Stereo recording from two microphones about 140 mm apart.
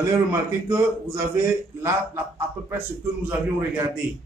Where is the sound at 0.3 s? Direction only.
20° right (ahead or behind).